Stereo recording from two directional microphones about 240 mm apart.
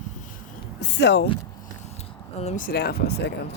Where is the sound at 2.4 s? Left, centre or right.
Left.